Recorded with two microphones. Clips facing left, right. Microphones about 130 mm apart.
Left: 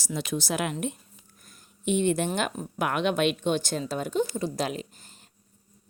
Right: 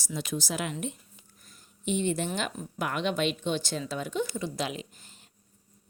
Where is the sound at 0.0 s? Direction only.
75° left (ahead or behind).